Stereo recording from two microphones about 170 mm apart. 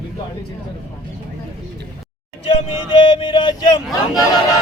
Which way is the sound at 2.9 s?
30° left (ahead or behind).